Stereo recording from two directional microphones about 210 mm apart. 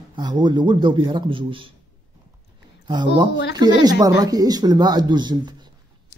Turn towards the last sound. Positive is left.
turn(degrees=-20)  # may be behind; listen again after turning